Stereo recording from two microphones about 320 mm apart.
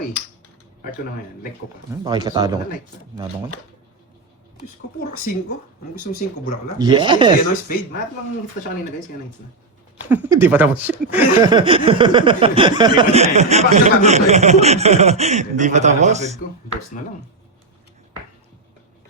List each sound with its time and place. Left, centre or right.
1.9 s speech: centre
4.9 s speech: left
6.7 s speech: centre
10.1 s speech: centre